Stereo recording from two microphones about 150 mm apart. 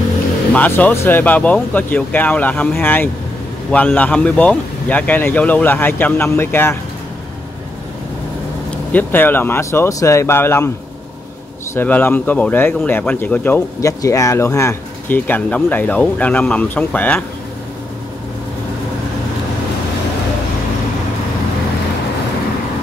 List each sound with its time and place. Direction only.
0.5 s speech: 10° left (ahead or behind)
8.6 s speech: 10° left (ahead or behind)
11.7 s speech: 10° left (ahead or behind)